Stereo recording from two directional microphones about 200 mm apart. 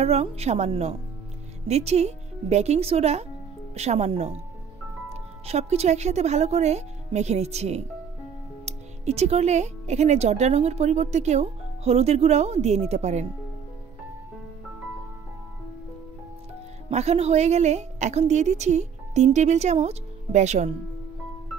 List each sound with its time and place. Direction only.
0.0 s speech: 30° right (ahead or behind)
16.9 s speech: 30° right (ahead or behind)